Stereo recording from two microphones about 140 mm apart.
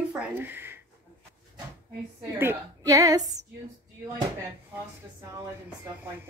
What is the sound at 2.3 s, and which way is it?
Speech, 20° right (ahead or behind).